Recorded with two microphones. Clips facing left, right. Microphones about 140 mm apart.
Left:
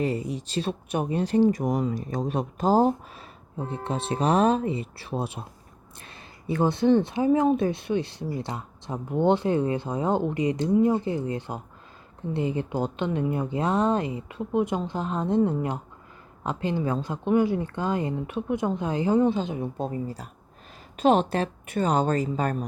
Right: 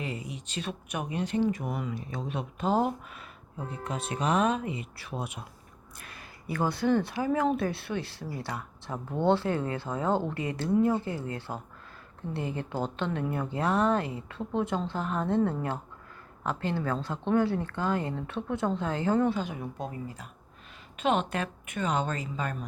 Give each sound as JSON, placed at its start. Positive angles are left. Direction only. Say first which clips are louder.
{"t": 0.0, "sound": "speech", "louder": "left 9 dB", "side_deg": 35}